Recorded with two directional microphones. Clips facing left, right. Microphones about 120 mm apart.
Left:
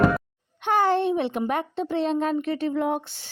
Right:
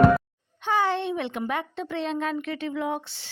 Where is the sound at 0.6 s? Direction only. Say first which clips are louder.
Left 3 dB; 55° left (ahead or behind).